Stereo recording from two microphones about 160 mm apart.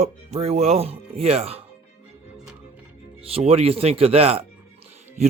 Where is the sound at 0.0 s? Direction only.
40° right (ahead or behind).